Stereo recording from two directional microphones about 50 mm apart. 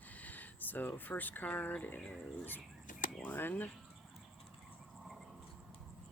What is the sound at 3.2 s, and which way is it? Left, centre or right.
Speech, left.